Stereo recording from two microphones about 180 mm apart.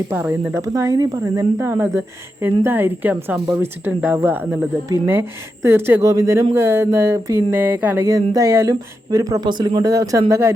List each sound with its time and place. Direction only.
0.1 s speech: 10° right (ahead or behind)